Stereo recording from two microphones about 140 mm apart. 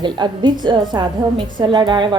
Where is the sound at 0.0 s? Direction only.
30° right (ahead or behind).